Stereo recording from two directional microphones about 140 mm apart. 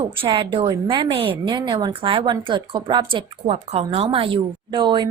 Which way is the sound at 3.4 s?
50° right (ahead or behind).